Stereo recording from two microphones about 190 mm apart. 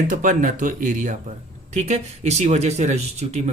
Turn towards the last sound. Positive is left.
turn(degrees=-35)  # may be behind; listen again after turning